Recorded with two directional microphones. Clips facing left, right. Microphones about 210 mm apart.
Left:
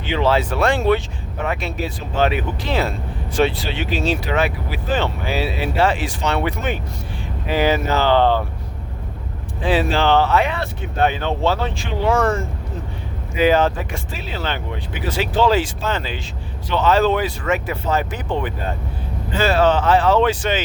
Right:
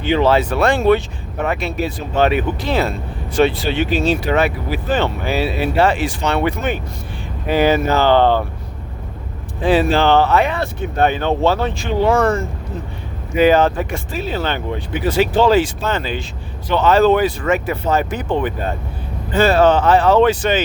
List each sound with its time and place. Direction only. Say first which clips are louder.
0.0 s speech: right 4 dB; 45° right (ahead or behind)
1.5 s speech: right 4 dB; 65° right (ahead or behind)
9.6 s speech: right 4 dB; 50° right (ahead or behind)
13.3 s speech: right 3 dB; 55° right (ahead or behind)